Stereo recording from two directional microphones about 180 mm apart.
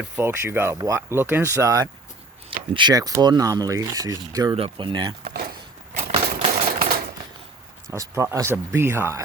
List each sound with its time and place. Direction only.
0.2 s speech: 10° right (ahead or behind)
4.5 s speech: 30° right (ahead or behind)
5.2 s speech: 60° right (ahead or behind)
5.9 s a sound: 35° right (ahead or behind)
7.9 s speech: 15° right (ahead or behind)